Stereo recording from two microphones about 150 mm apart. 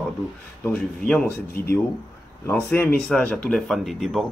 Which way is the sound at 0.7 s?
10° left (ahead or behind).